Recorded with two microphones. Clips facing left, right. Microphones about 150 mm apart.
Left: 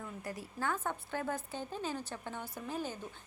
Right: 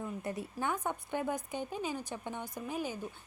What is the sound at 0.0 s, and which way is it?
A woman's voice, 25° right (ahead or behind).